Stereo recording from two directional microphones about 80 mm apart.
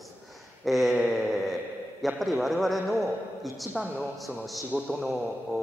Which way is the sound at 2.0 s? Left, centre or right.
Centre.